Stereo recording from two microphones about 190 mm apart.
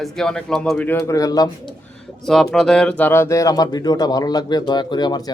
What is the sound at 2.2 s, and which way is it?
Speech, centre (ahead or behind).